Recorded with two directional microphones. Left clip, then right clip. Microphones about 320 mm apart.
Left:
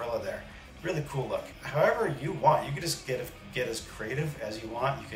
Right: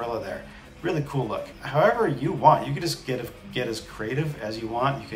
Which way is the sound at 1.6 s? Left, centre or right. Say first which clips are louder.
Right 5 dB; centre.